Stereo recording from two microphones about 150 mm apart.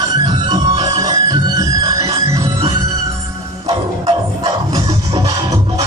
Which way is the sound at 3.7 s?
30° right (ahead or behind).